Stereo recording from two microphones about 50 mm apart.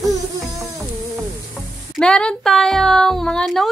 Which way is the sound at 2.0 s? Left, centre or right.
Centre.